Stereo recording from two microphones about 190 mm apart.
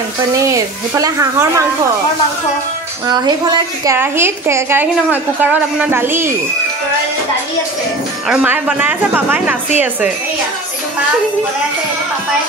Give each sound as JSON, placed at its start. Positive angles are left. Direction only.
{"t": 0.3, "sound": "a woman's voice", "side_deg": -15}
{"t": 3.8, "sound": "a woman's voice", "side_deg": -15}
{"t": 8.3, "sound": "a woman's voice", "side_deg": -5}